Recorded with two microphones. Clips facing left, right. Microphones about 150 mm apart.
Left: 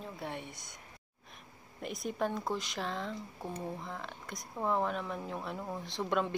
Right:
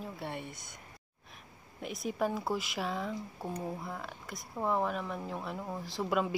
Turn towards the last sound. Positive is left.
turn(degrees=-5)  # may be behind; listen again after turning